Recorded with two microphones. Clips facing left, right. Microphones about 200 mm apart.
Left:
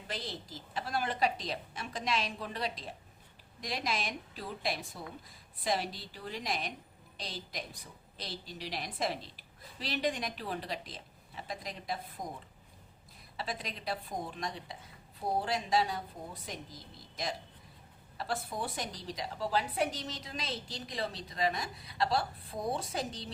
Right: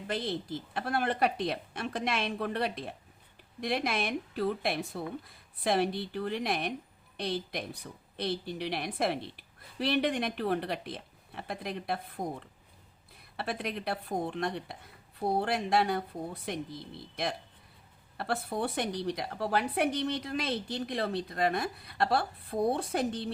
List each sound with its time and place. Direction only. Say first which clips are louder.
0.1 s a woman's voice: right 8 dB; 55° right (ahead or behind)